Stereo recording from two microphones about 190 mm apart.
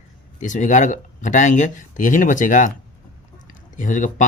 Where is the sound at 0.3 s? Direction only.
40° left (ahead or behind).